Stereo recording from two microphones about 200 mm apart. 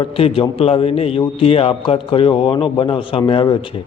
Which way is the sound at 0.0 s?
30° left (ahead or behind).